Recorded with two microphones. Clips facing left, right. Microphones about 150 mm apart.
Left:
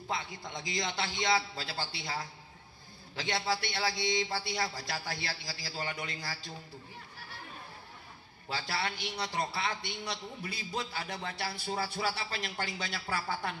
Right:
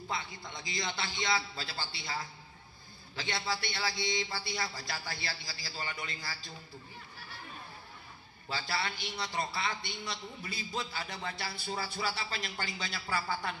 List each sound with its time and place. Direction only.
0.1 s a man's voice: 85° left
3.2 s a man's voice: 75° left (ahead or behind)
8.5 s speech: 65° left (ahead or behind)